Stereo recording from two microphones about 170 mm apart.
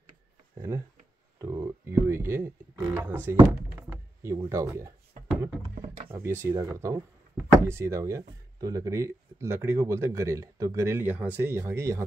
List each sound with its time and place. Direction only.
0.6 s speech: 15° right (ahead or behind)
1.4 s a sound: 15° right (ahead or behind)
6.1 s speech: 15° right (ahead or behind)